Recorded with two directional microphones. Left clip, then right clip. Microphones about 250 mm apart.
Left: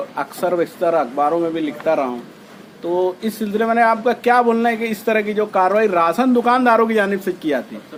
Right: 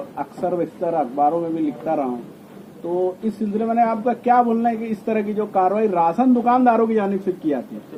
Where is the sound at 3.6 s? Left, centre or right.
Left.